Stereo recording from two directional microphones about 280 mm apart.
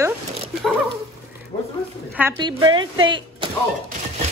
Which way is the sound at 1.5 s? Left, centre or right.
Left.